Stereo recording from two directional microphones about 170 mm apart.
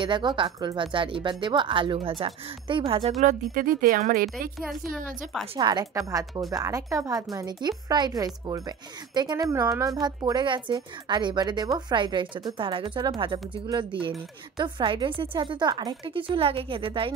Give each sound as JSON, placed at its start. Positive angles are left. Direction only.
{"t": 0.0, "sound": "a woman's voice", "side_deg": -25}
{"t": 3.2, "sound": "speech", "side_deg": -50}
{"t": 5.6, "sound": "a woman's voice", "side_deg": -25}